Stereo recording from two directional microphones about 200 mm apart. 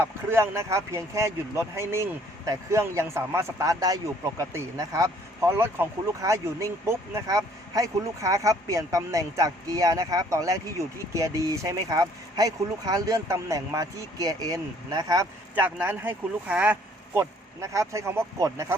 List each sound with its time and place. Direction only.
0.0 s speech: 15° right (ahead or behind)